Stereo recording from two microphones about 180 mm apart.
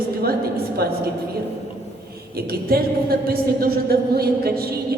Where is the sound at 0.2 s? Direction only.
60° right (ahead or behind).